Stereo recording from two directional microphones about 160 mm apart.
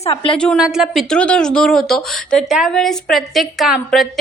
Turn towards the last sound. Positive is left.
turn(degrees=0)  # may be behind; listen again after turning